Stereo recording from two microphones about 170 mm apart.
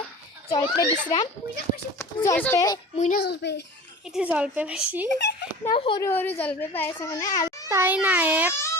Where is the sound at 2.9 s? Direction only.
45° left (ahead or behind).